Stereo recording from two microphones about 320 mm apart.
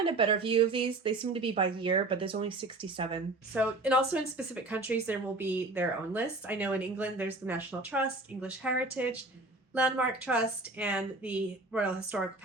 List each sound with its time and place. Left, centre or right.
0.0 s speech: centre
3.5 s speech: centre